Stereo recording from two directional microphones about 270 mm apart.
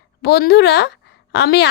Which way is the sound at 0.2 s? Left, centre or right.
Left.